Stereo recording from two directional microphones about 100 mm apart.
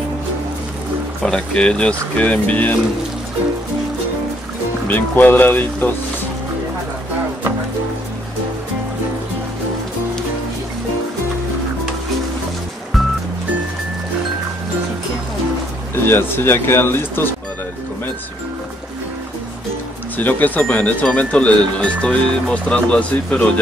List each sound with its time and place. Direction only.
1.2 s speech: 10° left (ahead or behind)
4.8 s speech: 15° left (ahead or behind)
15.9 s speech: 20° left (ahead or behind)
20.2 s speech: 15° left (ahead or behind)